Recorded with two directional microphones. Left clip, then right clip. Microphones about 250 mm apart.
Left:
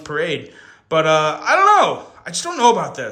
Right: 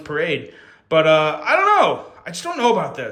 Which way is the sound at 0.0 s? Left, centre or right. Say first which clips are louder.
Even; centre.